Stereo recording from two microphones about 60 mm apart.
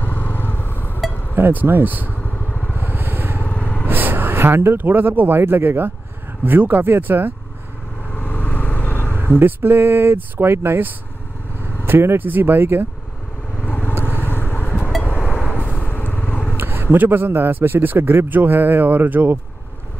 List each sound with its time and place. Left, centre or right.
0.0 s vehicle: left
1.3 s a man's voice: right
2.2 s vehicle: left
2.8 s vehicle: right
3.4 s vehicle: left
3.8 s a man's voice: right
8.1 s vehicle: left
9.1 s a man's voice: right
13.7 s vehicle: left
14.0 s vehicle: left
16.5 s a man's voice: right